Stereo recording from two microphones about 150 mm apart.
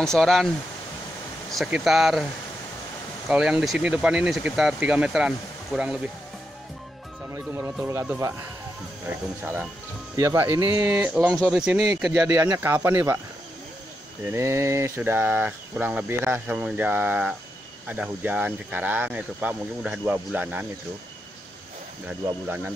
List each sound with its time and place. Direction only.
0.0 s speech: centre (ahead or behind)
1.6 s speech: centre (ahead or behind)
3.3 s speech: 5° right (ahead or behind)
7.3 s cricket: 15° right (ahead or behind)
9.4 s cricket: 10° right (ahead or behind)
11.5 s speech: 5° right (ahead or behind)
12.0 s cricket: 5° right (ahead or behind)
14.2 s cricket: 15° right (ahead or behind)
22.2 s cricket: 10° right (ahead or behind)